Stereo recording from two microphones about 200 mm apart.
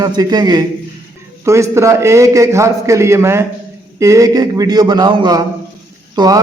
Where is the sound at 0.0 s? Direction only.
20° right (ahead or behind).